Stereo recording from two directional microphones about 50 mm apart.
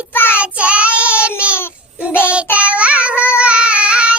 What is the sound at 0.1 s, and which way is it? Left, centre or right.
Child singing, left.